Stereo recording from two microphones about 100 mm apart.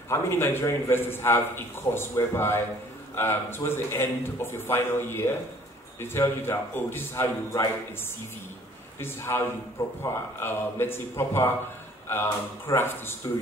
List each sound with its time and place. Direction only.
0.1 s a man's voice: 25° left (ahead or behind)
9.0 s a man's voice: 25° left (ahead or behind)